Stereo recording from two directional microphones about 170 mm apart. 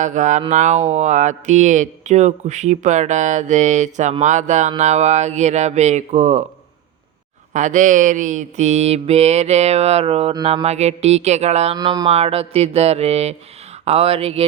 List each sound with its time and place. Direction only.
0.0 s speech: 45° right (ahead or behind)
4.8 s mantra: 40° right (ahead or behind)
7.5 s mantra: 45° right (ahead or behind)
11.8 s speech: 25° right (ahead or behind)
12.0 s mantra: 35° right (ahead or behind)